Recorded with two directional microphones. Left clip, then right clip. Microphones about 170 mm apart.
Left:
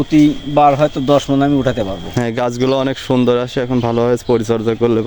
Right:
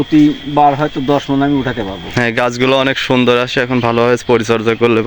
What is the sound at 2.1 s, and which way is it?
Speech, 15° left (ahead or behind).